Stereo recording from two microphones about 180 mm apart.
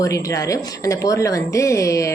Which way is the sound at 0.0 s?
20° left (ahead or behind).